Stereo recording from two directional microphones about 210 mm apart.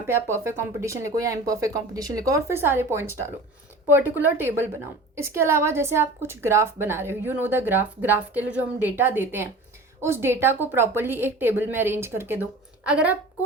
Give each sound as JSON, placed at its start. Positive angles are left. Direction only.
{"t": 0.1, "sound": "a woman's voice", "side_deg": -10}